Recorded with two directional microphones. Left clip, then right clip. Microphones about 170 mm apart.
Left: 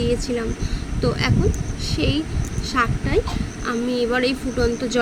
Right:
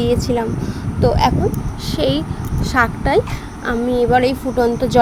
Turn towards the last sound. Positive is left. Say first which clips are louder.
# right 6 dB
turn(degrees=-25)  # may be behind; listen again after turning